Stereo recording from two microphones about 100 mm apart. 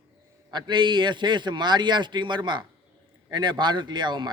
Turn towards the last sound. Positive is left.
turn(degrees=-50)  # may be behind; listen again after turning